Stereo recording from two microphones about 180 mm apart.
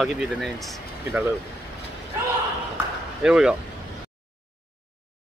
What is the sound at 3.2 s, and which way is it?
Speech, 5° right (ahead or behind).